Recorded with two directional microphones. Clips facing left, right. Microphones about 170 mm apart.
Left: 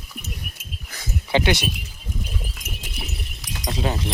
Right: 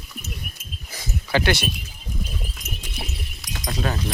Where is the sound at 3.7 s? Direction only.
20° left (ahead or behind).